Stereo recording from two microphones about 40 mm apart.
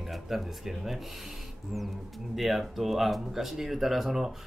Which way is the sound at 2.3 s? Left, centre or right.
Centre.